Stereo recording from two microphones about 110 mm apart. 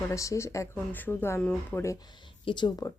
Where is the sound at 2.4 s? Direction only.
45° left (ahead or behind).